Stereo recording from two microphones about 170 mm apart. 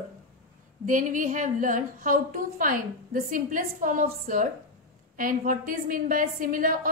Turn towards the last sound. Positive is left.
turn(degrees=-55)  # may be behind; listen again after turning